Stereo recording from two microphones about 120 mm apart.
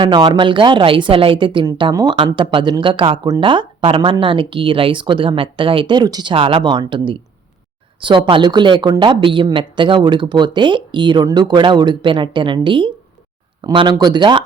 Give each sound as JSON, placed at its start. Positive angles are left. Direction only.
{"t": 0.0, "sound": "speech", "side_deg": -40}
{"t": 6.3, "sound": "a woman's voice", "side_deg": -50}
{"t": 13.9, "sound": "a woman's voice", "side_deg": -35}